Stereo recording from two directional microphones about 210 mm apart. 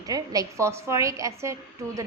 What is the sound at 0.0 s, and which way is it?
A woman's voice, 15° right (ahead or behind).